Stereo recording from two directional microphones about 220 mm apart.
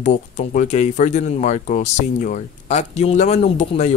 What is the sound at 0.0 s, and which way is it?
Speech, 35° left (ahead or behind).